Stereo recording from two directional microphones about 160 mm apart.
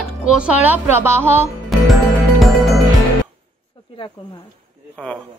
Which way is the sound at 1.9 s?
Centre (ahead or behind).